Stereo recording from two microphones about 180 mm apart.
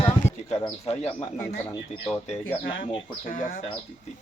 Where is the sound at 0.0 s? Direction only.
35° left (ahead or behind).